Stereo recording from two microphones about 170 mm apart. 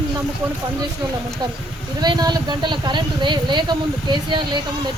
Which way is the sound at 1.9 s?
25° right (ahead or behind).